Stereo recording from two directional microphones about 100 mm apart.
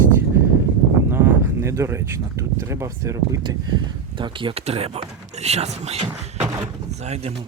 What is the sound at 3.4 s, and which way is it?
Speech, 45° right (ahead or behind).